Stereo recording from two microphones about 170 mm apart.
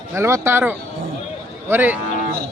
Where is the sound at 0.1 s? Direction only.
15° right (ahead or behind).